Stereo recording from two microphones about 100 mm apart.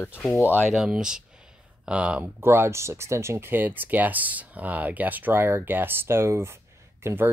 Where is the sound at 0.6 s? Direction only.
5° right (ahead or behind).